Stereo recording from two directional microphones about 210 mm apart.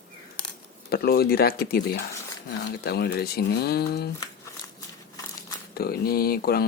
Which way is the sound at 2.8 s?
50° left (ahead or behind).